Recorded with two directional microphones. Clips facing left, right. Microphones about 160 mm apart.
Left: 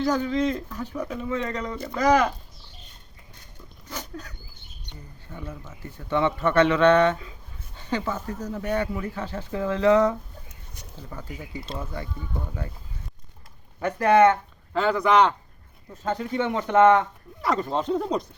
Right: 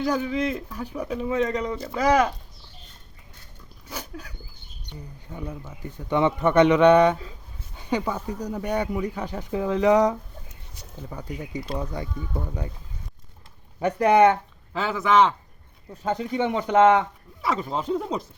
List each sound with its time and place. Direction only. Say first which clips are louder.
0.0 s speech: left 1 dB; 10° right (ahead or behind)
3.8 s a sound: even; 10° right (ahead or behind)
5.3 s speech: right 3 dB; 15° right (ahead or behind)
13.7 s speech: right 1 dB; 20° right (ahead or behind)
14.7 s speech: left 2 dB; 5° right (ahead or behind)
16.0 s speech: right 1 dB; 15° right (ahead or behind)
17.4 s speech: left 2 dB; centre (ahead or behind)